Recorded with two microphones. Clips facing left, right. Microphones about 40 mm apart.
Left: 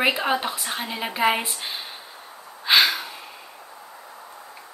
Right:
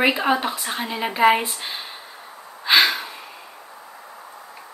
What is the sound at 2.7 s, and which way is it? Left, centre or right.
Gasp, centre.